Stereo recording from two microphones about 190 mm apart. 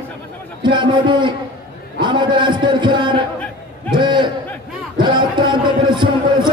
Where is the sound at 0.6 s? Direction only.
25° right (ahead or behind).